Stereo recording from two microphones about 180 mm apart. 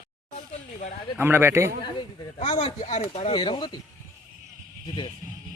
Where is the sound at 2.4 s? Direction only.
35° left (ahead or behind).